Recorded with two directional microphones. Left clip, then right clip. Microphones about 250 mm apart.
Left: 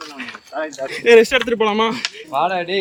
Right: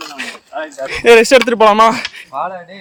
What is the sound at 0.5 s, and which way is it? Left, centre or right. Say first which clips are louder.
Speech: right 1 dB; right.